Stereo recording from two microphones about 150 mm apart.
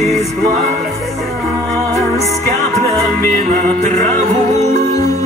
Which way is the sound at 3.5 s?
50° right (ahead or behind).